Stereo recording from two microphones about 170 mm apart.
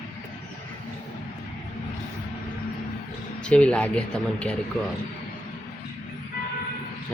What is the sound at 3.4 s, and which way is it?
Speech, 5° left (ahead or behind).